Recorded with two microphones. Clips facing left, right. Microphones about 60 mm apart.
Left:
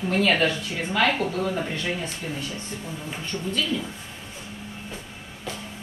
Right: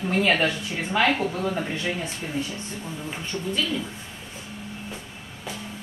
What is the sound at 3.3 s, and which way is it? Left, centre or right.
Speech, centre.